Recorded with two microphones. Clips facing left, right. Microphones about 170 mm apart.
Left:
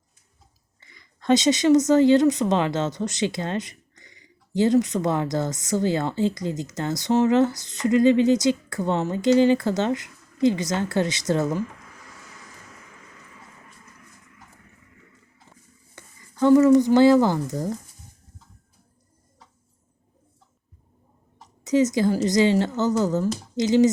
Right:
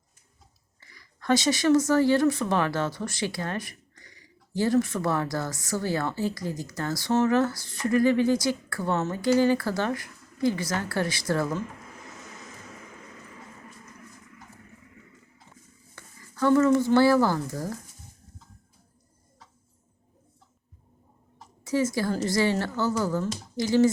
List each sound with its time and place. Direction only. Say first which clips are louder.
0.8 s speech: right 1 dB; 20° left (ahead or behind)
16.0 s speech: left 5 dB; 15° left (ahead or behind)
21.6 s speech: left 6 dB; 20° left (ahead or behind)